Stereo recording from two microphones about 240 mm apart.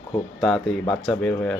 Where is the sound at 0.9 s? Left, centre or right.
Centre.